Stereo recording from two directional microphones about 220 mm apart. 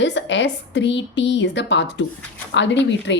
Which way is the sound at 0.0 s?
55° left (ahead or behind).